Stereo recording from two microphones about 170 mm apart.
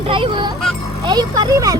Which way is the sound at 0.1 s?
30° right (ahead or behind).